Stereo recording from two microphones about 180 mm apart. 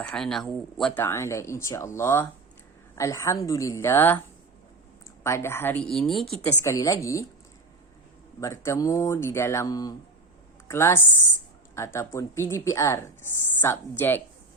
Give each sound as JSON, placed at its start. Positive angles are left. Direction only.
{"t": 0.0, "sound": "a woman's voice", "side_deg": 5}
{"t": 5.2, "sound": "speech", "side_deg": 15}
{"t": 6.4, "sound": "speech", "side_deg": 15}
{"t": 8.4, "sound": "speech", "side_deg": 15}